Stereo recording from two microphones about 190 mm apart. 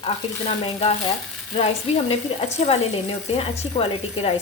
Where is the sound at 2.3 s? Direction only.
35° left (ahead or behind).